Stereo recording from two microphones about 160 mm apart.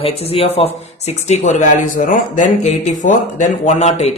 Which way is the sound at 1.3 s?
50° left (ahead or behind).